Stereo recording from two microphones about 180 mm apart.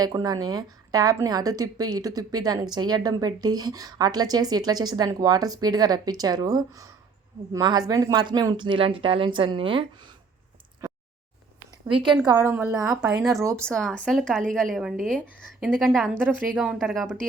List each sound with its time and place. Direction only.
0.0 s a woman's voice: 20° right (ahead or behind)
11.9 s a woman's voice: 30° right (ahead or behind)
12.2 s a woman's voice: 15° right (ahead or behind)
13.7 s speech: 5° left (ahead or behind)